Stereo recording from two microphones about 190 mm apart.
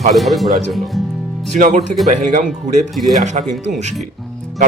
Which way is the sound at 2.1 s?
45° right (ahead or behind).